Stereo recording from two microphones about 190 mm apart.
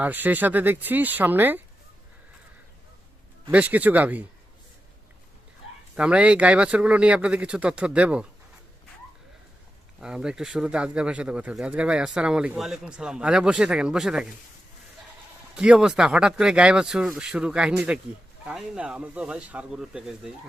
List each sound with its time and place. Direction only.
0.0 s speech: 10° right (ahead or behind)
3.5 s speech: 10° right (ahead or behind)
6.0 s speech: 5° right (ahead or behind)
10.0 s speech: 5° right (ahead or behind)
15.5 s speech: 5° right (ahead or behind)